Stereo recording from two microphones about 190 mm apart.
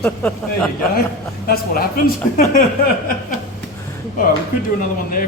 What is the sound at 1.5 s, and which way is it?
Speech, 50° left (ahead or behind).